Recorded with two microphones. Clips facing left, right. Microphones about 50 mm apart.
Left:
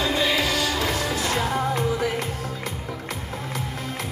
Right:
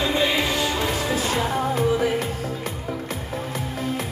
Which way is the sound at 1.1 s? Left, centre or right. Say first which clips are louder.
Right 1 dB; right.